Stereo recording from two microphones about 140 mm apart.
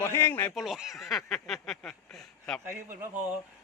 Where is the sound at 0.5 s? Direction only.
Centre (ahead or behind).